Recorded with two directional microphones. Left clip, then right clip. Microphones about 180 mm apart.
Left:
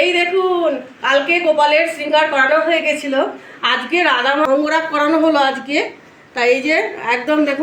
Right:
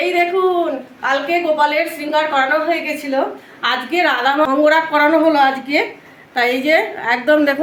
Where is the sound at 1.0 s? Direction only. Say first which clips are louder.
Left 3 dB; 15° right (ahead or behind).